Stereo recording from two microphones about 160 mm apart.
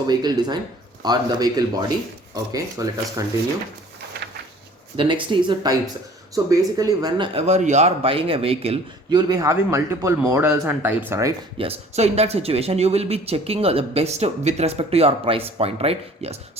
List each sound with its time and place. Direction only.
0.1 s speech: 25° right (ahead or behind)
4.9 s speech: 30° right (ahead or behind)
7.3 s speech: 45° right (ahead or behind)
9.3 s speech: 20° right (ahead or behind)
11.5 s speech: 35° right (ahead or behind)